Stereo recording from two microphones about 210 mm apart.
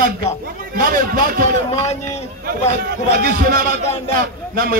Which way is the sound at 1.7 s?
30° left (ahead or behind).